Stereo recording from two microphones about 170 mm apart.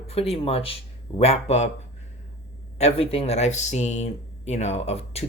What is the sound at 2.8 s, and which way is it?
Speech, 35° left (ahead or behind).